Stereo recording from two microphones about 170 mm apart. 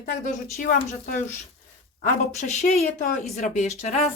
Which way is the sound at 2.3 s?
40° left (ahead or behind).